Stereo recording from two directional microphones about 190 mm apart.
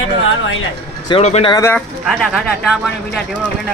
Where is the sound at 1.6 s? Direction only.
15° left (ahead or behind).